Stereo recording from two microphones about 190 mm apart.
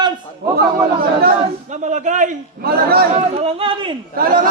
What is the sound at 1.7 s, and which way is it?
A man's voice, 40° right (ahead or behind).